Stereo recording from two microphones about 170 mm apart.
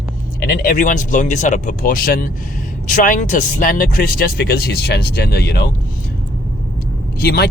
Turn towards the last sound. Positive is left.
turn(degrees=70)  # may be behind; listen again after turning